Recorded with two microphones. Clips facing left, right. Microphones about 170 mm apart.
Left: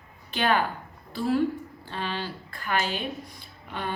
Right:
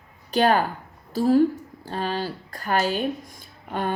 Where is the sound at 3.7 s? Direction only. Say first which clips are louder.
Right 6 dB; 45° right (ahead or behind).